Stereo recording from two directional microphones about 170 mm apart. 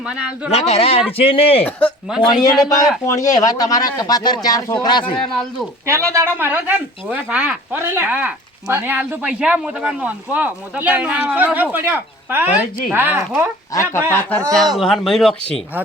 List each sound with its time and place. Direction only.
0.5 s speech: 35° left (ahead or behind)
2.4 s speech: 20° left (ahead or behind)
5.1 s speech: centre (ahead or behind)
5.8 s speech: 15° right (ahead or behind)
13.7 s speech: 15° left (ahead or behind)